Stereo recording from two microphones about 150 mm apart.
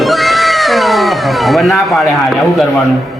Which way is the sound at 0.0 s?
Centre (ahead or behind).